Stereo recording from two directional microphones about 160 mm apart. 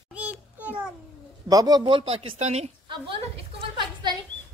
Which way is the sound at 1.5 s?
25° right (ahead or behind).